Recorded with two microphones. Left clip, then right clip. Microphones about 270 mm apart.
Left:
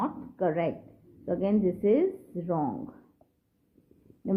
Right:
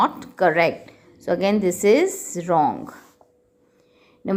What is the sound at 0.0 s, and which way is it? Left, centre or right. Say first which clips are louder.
A woman's voice: right 11 dB; right.